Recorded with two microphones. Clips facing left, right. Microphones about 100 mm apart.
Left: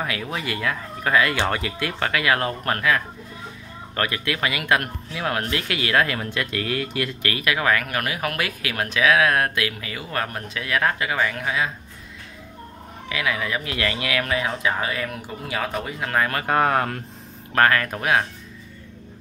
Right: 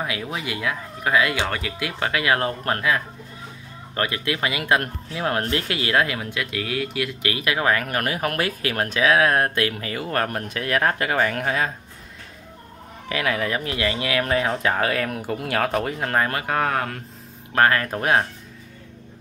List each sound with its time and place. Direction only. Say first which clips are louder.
0.0 s speech: even; 20° right (ahead or behind)
1.4 s speech: left 2 dB; centre (ahead or behind)
1.9 s speech: even; 20° right (ahead or behind)
6.1 s speech: left 1 dB; 10° right (ahead or behind)
7.2 s speech: right 1 dB; 20° right (ahead or behind); by 11.7 s 45° right (ahead or behind)
13.1 s speech: right 2 dB; 45° right (ahead or behind)
13.7 s speech: right 1 dB; 25° right (ahead or behind)
14.3 s speech: right 3 dB; 45° right (ahead or behind)
16.4 s speech: left 3 dB; 5° left (ahead or behind)
17.6 s speech: even; 25° right (ahead or behind)